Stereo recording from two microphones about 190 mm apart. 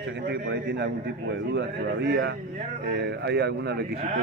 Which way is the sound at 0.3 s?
60° right (ahead or behind).